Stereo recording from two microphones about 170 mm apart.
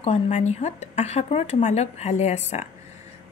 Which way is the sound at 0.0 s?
40° left (ahead or behind).